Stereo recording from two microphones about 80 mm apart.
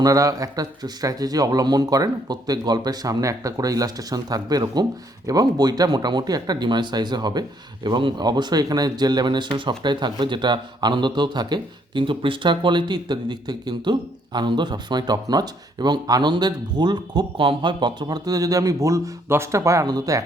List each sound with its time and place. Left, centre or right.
0.0 s speech: right
7.9 s speech: right